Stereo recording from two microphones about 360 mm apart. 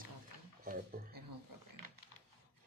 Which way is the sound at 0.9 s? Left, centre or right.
Right.